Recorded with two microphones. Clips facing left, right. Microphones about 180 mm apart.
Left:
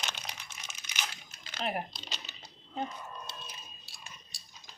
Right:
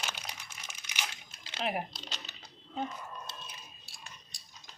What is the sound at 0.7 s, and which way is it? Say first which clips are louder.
Crumpling: even; 20° right (ahead or behind).